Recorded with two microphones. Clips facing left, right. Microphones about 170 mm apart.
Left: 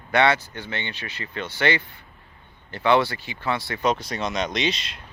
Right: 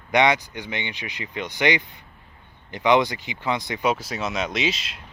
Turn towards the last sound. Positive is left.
turn(degrees=-5)  # may be behind; listen again after turning